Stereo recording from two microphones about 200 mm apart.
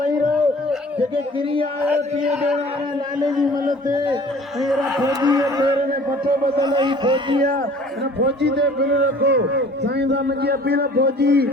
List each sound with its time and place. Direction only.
1.1 s speech: 25° right (ahead or behind)
4.6 s a sound: centre (ahead or behind)
5.0 s speech: 20° right (ahead or behind)
8.2 s a man's voice: 60° right (ahead or behind)